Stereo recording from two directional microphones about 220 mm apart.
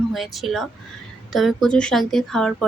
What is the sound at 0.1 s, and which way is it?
Speech, centre (ahead or behind).